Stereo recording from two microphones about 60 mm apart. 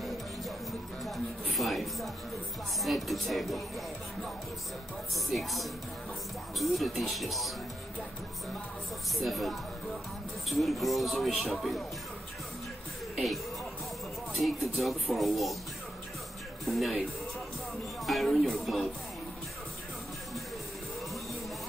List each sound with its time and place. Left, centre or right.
0.7 s music: centre
2.8 s speech: centre
5.1 s speech: centre
9.1 s speech: centre
13.1 s speech: centre
16.6 s speech: centre
18.0 s speech: centre